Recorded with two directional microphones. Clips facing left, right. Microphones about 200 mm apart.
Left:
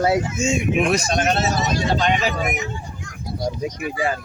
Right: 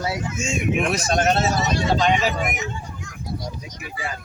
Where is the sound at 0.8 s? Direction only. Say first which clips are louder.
Left 4 dB; centre (ahead or behind).